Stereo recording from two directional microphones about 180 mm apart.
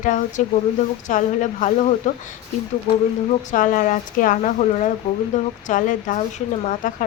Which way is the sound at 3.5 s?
45° left (ahead or behind).